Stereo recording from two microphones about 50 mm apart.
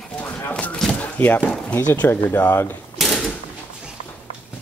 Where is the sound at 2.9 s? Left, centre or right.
Centre.